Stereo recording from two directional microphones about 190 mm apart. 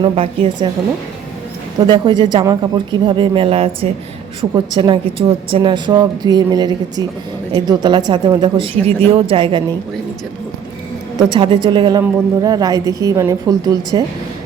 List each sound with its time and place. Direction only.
0.0 s a woman's voice: 25° right (ahead or behind)
1.9 s a woman's voice: 25° right (ahead or behind)
11.2 s a woman's voice: 25° right (ahead or behind)